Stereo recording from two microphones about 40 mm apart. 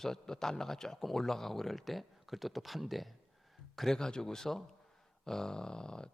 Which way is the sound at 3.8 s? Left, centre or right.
Centre.